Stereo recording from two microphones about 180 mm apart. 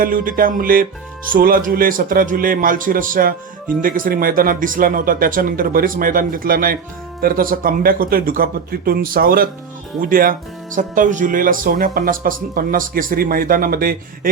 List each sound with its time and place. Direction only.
0.0 s speech: 50° right (ahead or behind)